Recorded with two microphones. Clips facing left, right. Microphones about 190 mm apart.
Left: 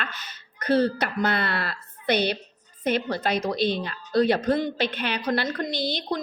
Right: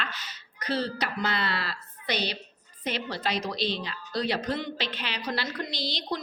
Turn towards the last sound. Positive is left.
turn(degrees=55)  # may be behind; listen again after turning